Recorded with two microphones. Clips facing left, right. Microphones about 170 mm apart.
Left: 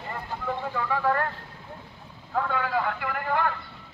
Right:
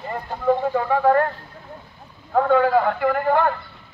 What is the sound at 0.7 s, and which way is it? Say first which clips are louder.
Speech: right 8 dB; 40° right (ahead or behind).